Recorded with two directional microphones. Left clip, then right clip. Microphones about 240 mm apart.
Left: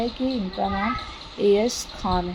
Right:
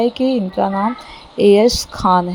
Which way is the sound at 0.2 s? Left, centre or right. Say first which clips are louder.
Right 10 dB; right.